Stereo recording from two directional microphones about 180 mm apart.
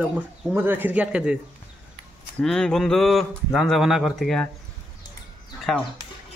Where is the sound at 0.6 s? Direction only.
10° right (ahead or behind).